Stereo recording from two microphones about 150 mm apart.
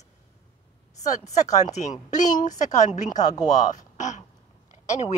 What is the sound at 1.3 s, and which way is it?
A woman's voice, 50° left (ahead or behind).